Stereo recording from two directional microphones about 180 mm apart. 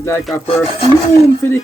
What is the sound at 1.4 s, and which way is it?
Speech, 15° left (ahead or behind).